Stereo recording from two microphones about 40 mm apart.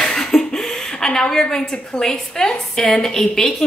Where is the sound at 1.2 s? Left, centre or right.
Centre.